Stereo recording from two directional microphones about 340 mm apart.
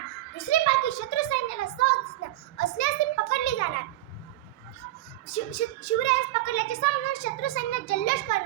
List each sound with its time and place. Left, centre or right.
0.3 s a child's voice: left
2.6 s a sound: left
5.3 s speech: left